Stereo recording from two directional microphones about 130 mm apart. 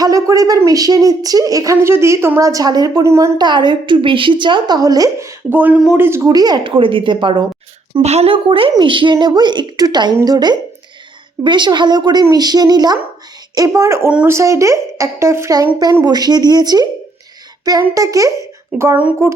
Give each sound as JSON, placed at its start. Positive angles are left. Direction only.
{"t": 0.0, "sound": "a woman's voice", "side_deg": -25}
{"t": 3.3, "sound": "a woman's voice", "side_deg": -35}
{"t": 8.0, "sound": "a woman's voice", "side_deg": -50}
{"t": 18.7, "sound": "speech", "side_deg": -10}
{"t": 19.2, "sound": "a woman's voice", "side_deg": -25}